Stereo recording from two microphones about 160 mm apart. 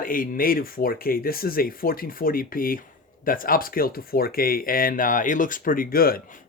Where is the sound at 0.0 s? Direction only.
60° left (ahead or behind).